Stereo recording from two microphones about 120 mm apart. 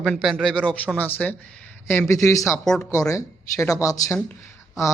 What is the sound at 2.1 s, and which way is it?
Speech, 25° left (ahead or behind).